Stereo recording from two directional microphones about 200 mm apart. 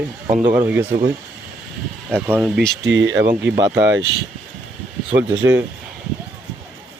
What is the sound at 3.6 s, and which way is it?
Speech, 20° right (ahead or behind).